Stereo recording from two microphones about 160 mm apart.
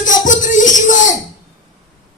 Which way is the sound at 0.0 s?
50° left (ahead or behind).